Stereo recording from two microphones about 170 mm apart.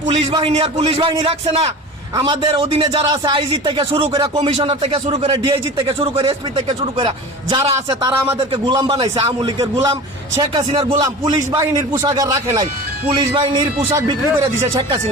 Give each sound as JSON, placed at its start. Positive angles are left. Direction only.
{"t": 0.3, "sound": "a man's voice", "side_deg": -30}
{"t": 7.5, "sound": "a man's voice", "side_deg": -20}